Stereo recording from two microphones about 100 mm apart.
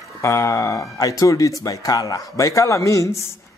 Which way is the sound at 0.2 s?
30° left (ahead or behind).